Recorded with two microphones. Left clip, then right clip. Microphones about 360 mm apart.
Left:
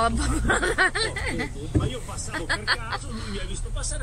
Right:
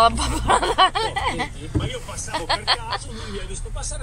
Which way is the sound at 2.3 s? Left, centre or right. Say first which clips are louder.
Right 4 dB; centre.